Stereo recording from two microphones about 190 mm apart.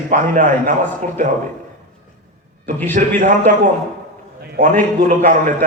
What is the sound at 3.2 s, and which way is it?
Speech, 40° right (ahead or behind).